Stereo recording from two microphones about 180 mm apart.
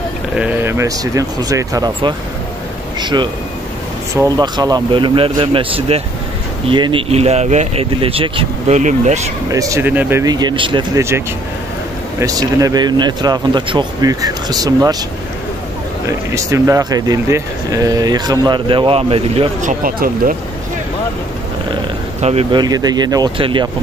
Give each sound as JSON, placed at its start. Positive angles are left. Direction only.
{"t": 0.4, "sound": "speech", "side_deg": -10}
{"t": 9.5, "sound": "speech", "side_deg": -20}
{"t": 11.0, "sound": "speech", "side_deg": -15}
{"t": 16.1, "sound": "speech", "side_deg": -15}
{"t": 19.6, "sound": "speech", "side_deg": -50}
{"t": 22.2, "sound": "speech", "side_deg": -35}